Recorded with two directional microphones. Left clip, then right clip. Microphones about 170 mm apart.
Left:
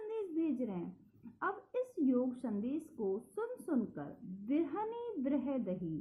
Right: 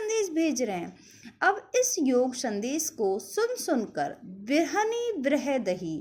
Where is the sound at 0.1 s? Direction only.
20° right (ahead or behind).